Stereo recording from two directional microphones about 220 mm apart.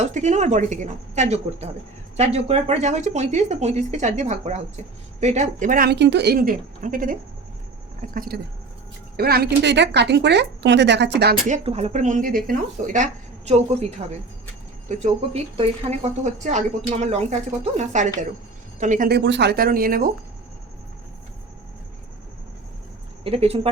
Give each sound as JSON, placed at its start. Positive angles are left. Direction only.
{"t": 0.0, "sound": "a woman's voice", "side_deg": -35}
{"t": 11.4, "sound": "a woman's voice", "side_deg": -30}
{"t": 14.8, "sound": "a woman's voice", "side_deg": -30}
{"t": 23.2, "sound": "speech", "side_deg": -25}